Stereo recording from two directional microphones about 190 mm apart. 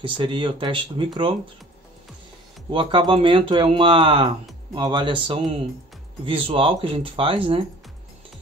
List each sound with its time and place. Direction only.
0.0 s speech: 25° right (ahead or behind)
2.7 s speech: 25° right (ahead or behind)